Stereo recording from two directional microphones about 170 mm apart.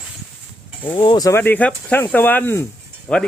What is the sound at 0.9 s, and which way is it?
Speech, 30° left (ahead or behind).